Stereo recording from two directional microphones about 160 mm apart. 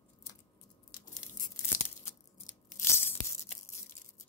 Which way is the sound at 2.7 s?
15° left (ahead or behind).